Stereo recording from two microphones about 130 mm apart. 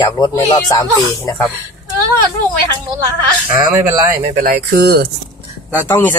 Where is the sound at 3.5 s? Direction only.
30° right (ahead or behind).